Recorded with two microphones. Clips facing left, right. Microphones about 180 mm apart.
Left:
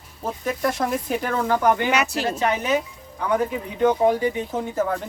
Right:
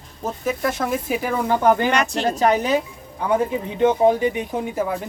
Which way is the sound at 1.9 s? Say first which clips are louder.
Right 1 dB; 5° left (ahead or behind).